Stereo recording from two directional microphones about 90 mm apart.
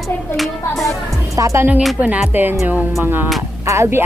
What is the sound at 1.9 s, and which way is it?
Speech, 15° right (ahead or behind).